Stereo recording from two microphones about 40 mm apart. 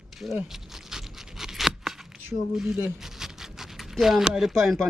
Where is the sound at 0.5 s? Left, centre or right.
Centre.